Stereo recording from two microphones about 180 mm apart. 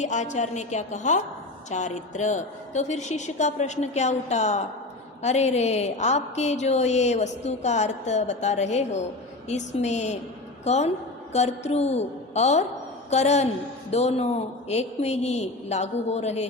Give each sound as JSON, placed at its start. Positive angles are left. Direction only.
{"t": 0.0, "sound": "a woman's voice", "side_deg": 40}